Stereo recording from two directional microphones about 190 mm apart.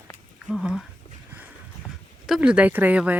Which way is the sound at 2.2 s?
5° right (ahead or behind).